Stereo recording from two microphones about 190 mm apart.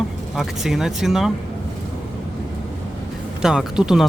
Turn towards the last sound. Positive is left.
turn(degrees=-5)  # may be behind; listen again after turning